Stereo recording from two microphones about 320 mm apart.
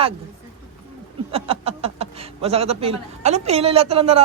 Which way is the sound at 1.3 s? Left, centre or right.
Centre.